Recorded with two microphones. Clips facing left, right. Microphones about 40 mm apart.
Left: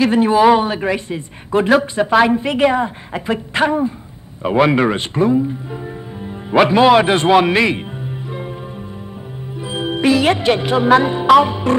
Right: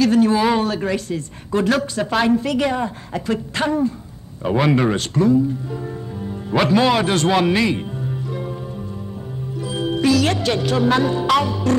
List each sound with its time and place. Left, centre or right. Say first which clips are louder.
0.0 s speech: left 4 dB; left
8.3 s music: even; left
9.6 s speech: left 1 dB; left